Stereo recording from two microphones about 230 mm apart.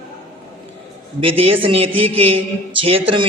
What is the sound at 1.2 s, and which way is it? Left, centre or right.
A man's voice, right.